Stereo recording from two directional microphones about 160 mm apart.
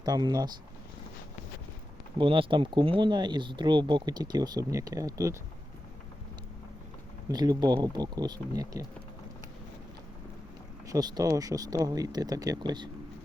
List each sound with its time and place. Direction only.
0.0 s speech: 25° right (ahead or behind)
2.1 s speech: 30° right (ahead or behind)
7.3 s speech: 25° right (ahead or behind)
10.8 s speech: 25° right (ahead or behind)